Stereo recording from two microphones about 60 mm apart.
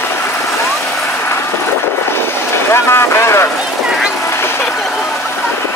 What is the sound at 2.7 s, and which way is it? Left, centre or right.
Speech, left.